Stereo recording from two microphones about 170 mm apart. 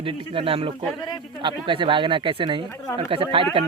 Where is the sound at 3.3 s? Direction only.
30° right (ahead or behind).